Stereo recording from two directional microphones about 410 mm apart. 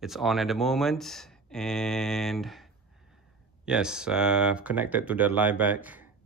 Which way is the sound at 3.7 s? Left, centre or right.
Centre.